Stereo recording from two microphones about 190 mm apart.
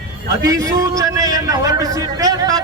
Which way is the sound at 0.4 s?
20° right (ahead or behind).